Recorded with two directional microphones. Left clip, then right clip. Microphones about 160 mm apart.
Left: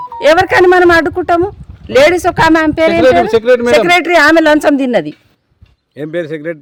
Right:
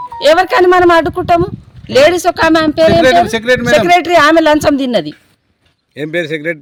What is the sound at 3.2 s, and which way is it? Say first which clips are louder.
Speech: left 3 dB; 75° left (ahead or behind).